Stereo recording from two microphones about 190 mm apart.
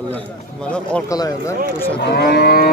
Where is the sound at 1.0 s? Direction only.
20° left (ahead or behind).